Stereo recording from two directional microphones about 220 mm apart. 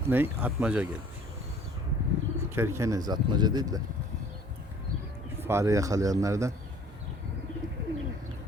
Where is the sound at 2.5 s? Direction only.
10° right (ahead or behind).